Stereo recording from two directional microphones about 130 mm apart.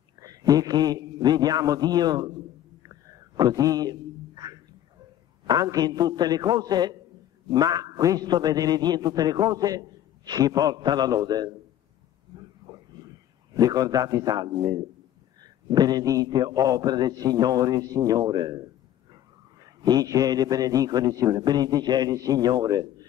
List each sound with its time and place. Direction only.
0.2 s a man's voice: 30° right (ahead or behind)
2.9 s a sound: 30° right (ahead or behind)
5.5 s a man's voice: 30° right (ahead or behind)
13.6 s a man's voice: 30° right (ahead or behind)
19.6 s a man's voice: 30° right (ahead or behind)